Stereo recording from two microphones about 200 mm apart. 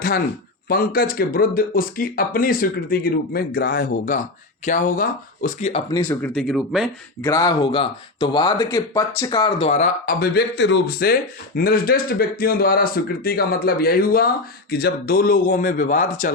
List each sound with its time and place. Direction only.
0.7 s speech: 45° left (ahead or behind)
5.9 s speech: 10° left (ahead or behind)
7.2 s speech: 15° left (ahead or behind)
9.6 s speech: 35° left (ahead or behind)